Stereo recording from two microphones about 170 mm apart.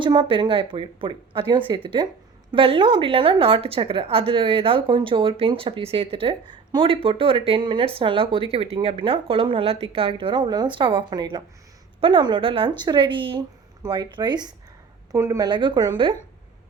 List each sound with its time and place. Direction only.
0.0 s a woman's voice: 30° right (ahead or behind)